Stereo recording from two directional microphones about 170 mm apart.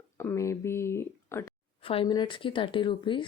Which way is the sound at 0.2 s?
15° left (ahead or behind).